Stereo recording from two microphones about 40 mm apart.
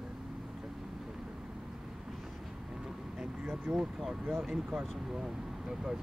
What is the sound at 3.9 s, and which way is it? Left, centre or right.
Speech, centre.